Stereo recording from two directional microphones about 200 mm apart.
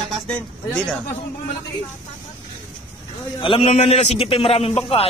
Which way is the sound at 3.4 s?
25° left (ahead or behind).